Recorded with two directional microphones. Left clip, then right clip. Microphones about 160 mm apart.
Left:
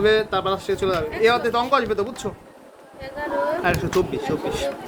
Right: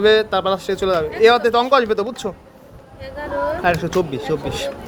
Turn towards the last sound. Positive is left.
turn(degrees=-50)  # may be behind; listen again after turning